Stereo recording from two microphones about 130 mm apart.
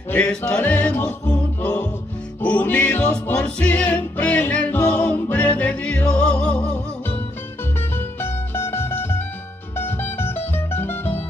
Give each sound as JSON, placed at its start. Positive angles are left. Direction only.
{"t": 0.1, "sound": "music", "side_deg": 15}
{"t": 8.2, "sound": "music", "side_deg": 20}